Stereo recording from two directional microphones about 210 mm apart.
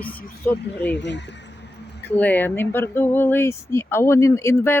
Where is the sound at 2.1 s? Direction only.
10° left (ahead or behind).